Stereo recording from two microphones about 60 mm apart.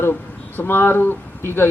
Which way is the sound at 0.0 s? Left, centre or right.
Left.